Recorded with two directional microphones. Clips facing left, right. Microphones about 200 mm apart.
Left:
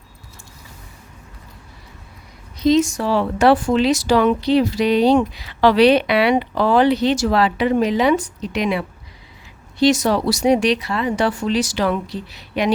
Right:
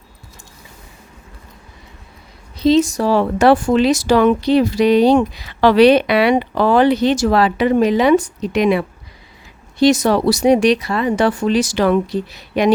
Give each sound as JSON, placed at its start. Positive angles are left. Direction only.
{"t": 2.6, "sound": "speech", "side_deg": -30}
{"t": 9.8, "sound": "speech", "side_deg": -50}